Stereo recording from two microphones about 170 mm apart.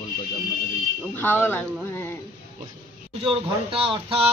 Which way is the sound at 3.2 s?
30° right (ahead or behind).